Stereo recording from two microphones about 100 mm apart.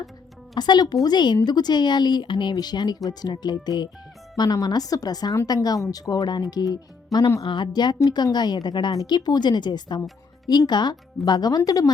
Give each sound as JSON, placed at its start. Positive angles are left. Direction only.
{"t": 0.5, "sound": "speech", "side_deg": 45}
{"t": 7.4, "sound": "speech", "side_deg": 50}